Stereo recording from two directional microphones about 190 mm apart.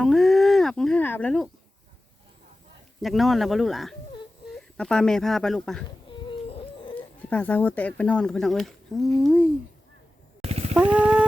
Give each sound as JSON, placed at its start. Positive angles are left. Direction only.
{"t": 0.0, "sound": "speech", "side_deg": 0}
{"t": 3.0, "sound": "speech", "side_deg": 0}
{"t": 6.1, "sound": "music", "side_deg": 25}
{"t": 7.3, "sound": "speech", "side_deg": 10}
{"t": 10.4, "sound": "a sound", "side_deg": -35}
{"t": 10.8, "sound": "a sound", "side_deg": -5}